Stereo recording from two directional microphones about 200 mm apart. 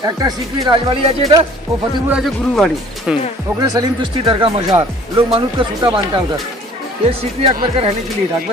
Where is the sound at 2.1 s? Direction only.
Centre (ahead or behind).